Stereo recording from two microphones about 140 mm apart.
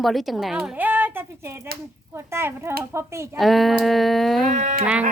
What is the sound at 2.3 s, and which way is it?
Speech, 20° right (ahead or behind).